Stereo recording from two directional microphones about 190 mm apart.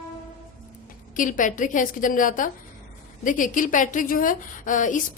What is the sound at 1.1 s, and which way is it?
A woman's voice, 45° left (ahead or behind).